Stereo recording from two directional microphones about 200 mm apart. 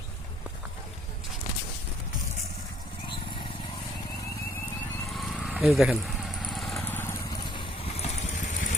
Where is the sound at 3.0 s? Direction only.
25° left (ahead or behind).